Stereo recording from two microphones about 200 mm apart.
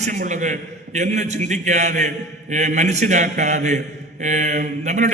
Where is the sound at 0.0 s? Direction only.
40° right (ahead or behind).